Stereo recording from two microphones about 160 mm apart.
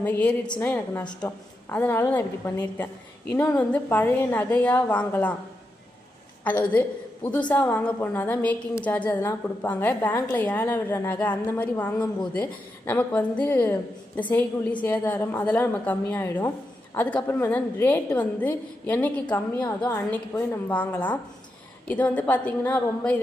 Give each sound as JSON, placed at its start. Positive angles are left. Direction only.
{"t": 0.0, "sound": "a woman's voice", "side_deg": 10}
{"t": 6.4, "sound": "a woman's voice", "side_deg": 10}